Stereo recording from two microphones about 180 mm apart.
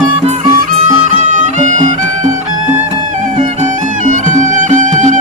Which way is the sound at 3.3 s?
40° right (ahead or behind).